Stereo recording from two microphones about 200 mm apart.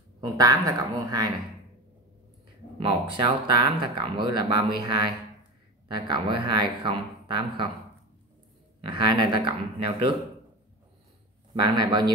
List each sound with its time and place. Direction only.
0.2 s speech: 20° right (ahead or behind)
2.8 s speech: 25° right (ahead or behind)
8.8 s speech: 20° right (ahead or behind)
11.5 s speech: 20° right (ahead or behind)